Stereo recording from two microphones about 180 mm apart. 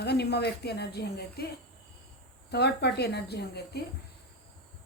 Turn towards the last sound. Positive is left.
turn(degrees=65)  # may be behind; listen again after turning